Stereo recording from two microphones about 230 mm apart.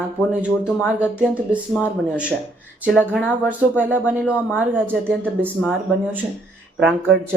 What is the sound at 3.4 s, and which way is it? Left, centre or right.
Speech, centre.